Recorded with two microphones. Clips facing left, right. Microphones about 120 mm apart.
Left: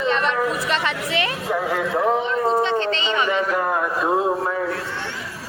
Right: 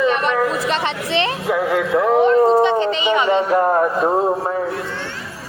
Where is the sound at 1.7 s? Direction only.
60° right (ahead or behind).